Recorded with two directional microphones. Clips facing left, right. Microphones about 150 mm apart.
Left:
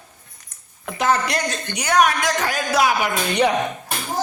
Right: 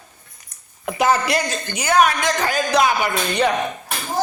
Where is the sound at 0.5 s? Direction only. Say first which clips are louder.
Even; 15° right (ahead or behind).